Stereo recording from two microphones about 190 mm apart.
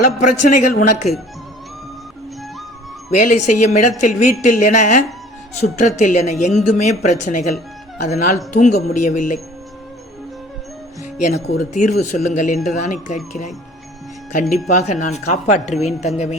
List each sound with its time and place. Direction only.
0.2 s a woman's voice: 40° left (ahead or behind)
3.1 s a woman's voice: 40° left (ahead or behind)
11.2 s a woman's voice: 35° left (ahead or behind)
14.5 s a woman's voice: 35° left (ahead or behind)